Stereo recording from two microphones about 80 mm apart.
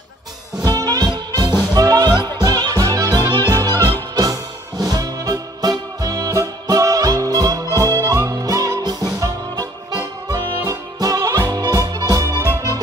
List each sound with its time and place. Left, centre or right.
0.7 s music: right
3.3 s music: right